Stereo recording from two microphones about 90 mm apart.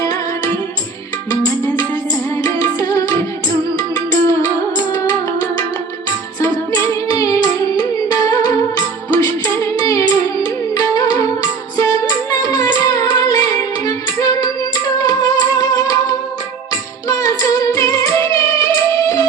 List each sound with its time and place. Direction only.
0.0 s music: 45° left (ahead or behind)
6.7 s singing: 45° left (ahead or behind)
7.3 s music: 50° left (ahead or behind)
17.1 s music: 40° left (ahead or behind)